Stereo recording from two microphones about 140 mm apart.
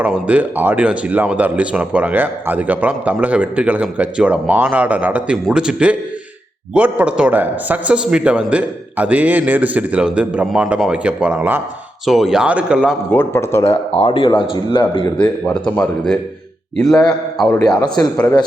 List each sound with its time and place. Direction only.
0.0 s speech: 10° right (ahead or behind)
13.1 s a man's voice: 15° left (ahead or behind)
13.7 s a man's voice: 45° left (ahead or behind)
15.6 s speech: 5° left (ahead or behind)